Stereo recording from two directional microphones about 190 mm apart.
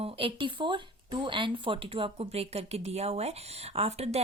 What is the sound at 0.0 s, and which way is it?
Speech, 30° right (ahead or behind).